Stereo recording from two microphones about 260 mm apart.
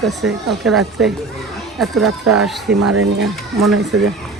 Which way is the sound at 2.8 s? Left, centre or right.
Right.